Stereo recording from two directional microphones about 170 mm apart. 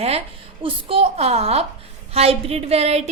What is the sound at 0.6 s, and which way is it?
A woman's voice, 30° right (ahead or behind).